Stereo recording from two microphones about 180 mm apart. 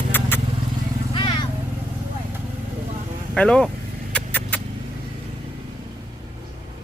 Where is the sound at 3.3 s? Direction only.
5° left (ahead or behind).